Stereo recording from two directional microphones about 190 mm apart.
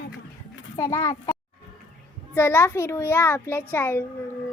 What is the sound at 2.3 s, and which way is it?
A child's voice, 10° left (ahead or behind).